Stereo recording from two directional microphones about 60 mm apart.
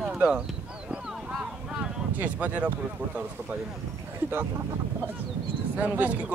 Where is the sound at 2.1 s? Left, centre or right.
Right.